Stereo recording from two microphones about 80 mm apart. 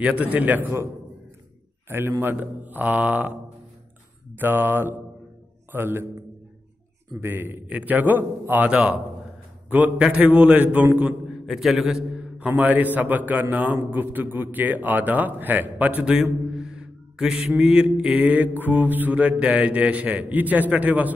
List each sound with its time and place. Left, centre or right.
0.0 s a man's voice: centre
1.9 s a man's voice: right
4.4 s a man's voice: right
7.2 s a man's voice: right
11.4 s a man's voice: centre
12.4 s a man's voice: centre